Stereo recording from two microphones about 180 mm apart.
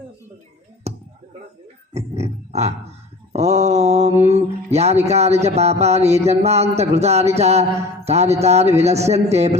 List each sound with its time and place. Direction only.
0.9 s a sound: 35° right (ahead or behind)
1.9 s grunt: 35° right (ahead or behind)
3.3 s mantra: 35° right (ahead or behind)